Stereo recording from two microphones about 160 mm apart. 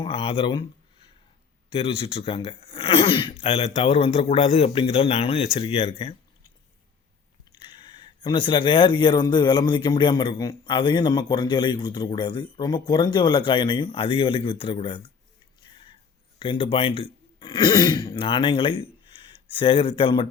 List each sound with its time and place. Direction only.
0.0 s speech: 35° left (ahead or behind)
7.5 s speech: 30° left (ahead or behind)
15.6 s a sound: 30° left (ahead or behind)
16.4 s speech: 30° left (ahead or behind)